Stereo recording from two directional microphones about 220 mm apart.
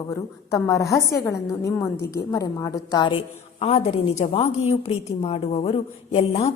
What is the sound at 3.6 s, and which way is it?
A woman's voice, 30° left (ahead or behind).